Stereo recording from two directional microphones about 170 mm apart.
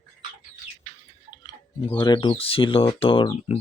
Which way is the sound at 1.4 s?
25° left (ahead or behind).